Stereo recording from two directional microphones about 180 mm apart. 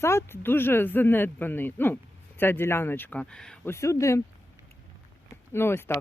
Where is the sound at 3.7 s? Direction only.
15° left (ahead or behind).